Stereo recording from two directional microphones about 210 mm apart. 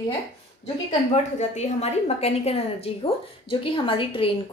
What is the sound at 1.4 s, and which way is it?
A woman's voice, 35° left (ahead or behind).